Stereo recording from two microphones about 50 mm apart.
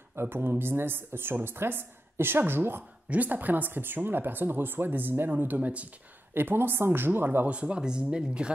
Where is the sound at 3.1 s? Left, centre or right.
Right.